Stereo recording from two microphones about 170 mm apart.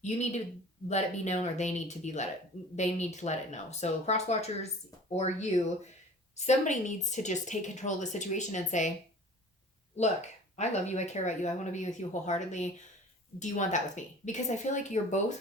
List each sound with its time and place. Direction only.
0.0 s speech: 45° left (ahead or behind)
9.9 s speech: 40° left (ahead or behind)